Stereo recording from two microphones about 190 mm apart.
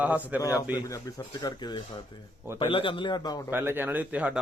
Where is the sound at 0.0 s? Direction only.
10° right (ahead or behind).